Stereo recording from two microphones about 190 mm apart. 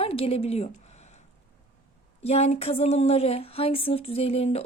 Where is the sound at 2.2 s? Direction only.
35° left (ahead or behind).